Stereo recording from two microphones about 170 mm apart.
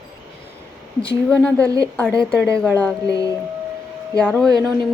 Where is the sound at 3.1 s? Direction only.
20° right (ahead or behind).